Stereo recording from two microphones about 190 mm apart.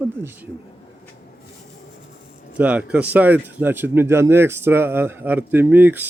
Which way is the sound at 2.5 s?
5° right (ahead or behind).